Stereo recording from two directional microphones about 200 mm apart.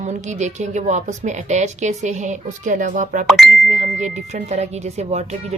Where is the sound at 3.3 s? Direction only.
Centre (ahead or behind).